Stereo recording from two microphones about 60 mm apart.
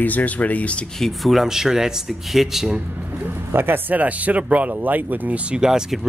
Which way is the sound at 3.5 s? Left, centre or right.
Right.